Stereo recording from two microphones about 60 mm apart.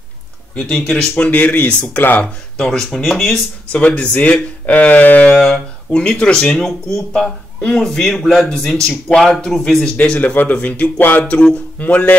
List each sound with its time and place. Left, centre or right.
0.7 s speech: centre
1.1 s speech: left
2.6 s speech: centre
3.7 s speech: centre
6.5 s speech: centre
9.9 s speech: left